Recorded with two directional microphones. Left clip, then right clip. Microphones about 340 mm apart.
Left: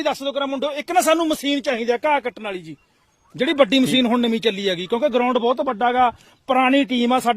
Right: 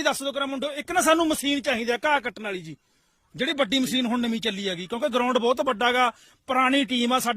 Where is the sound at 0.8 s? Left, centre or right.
Right.